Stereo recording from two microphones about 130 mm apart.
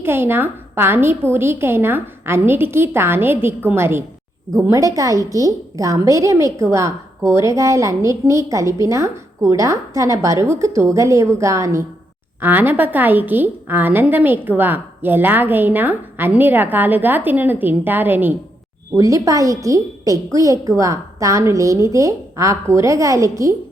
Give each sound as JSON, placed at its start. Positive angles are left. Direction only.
{"t": 0.0, "sound": "a woman's voice", "side_deg": -15}
{"t": 18.9, "sound": "a woman's voice", "side_deg": -25}